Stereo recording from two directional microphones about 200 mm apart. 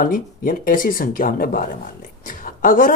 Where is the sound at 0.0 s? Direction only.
45° left (ahead or behind).